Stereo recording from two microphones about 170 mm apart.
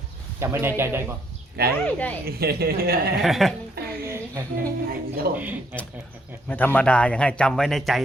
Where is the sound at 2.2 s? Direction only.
65° right (ahead or behind).